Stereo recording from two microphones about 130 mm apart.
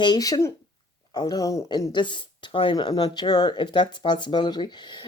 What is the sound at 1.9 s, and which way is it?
Speech, 35° left (ahead or behind).